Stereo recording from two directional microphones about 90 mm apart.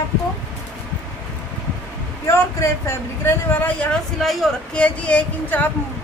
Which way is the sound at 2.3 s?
30° left (ahead or behind).